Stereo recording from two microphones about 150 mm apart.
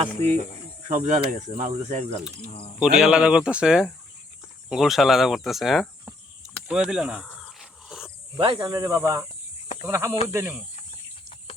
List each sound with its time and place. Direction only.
0.0 s speech: 45° right (ahead or behind)
2.4 s speech: 40° left (ahead or behind)
2.7 s speech: 5° right (ahead or behind)
6.7 s cricket: 5° right (ahead or behind)
8.4 s speech: 30° right (ahead or behind); by 10.7 s 10° right (ahead or behind)